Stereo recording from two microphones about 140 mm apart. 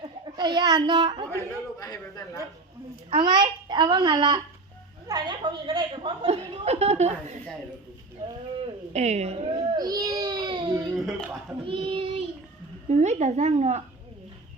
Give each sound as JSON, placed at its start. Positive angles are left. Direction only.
{"t": 0.0, "sound": "a sound", "side_deg": -30}
{"t": 1.8, "sound": "a man's voice", "side_deg": 25}
{"t": 3.1, "sound": "a woman's voice", "side_deg": -35}
{"t": 8.9, "sound": "babbling", "side_deg": -55}
{"t": 10.8, "sound": "speech", "side_deg": 0}
{"t": 11.6, "sound": "child singing", "side_deg": -40}
{"t": 12.9, "sound": "a woman's voice", "side_deg": -55}